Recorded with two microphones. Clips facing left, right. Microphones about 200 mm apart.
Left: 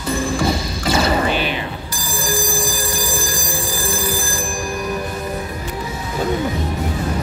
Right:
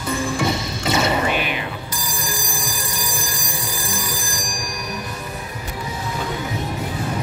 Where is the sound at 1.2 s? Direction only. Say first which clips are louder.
Left 2 dB; 30° left (ahead or behind).